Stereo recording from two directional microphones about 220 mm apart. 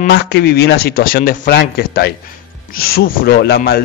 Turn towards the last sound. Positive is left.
turn(degrees=45)  # may be behind; listen again after turning